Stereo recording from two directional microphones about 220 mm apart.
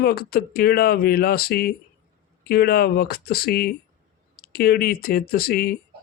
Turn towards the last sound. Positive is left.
turn(degrees=45)  # may be behind; listen again after turning